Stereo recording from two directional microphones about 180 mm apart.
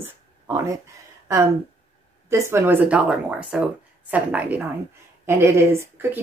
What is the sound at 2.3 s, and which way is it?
Speech, 15° right (ahead or behind).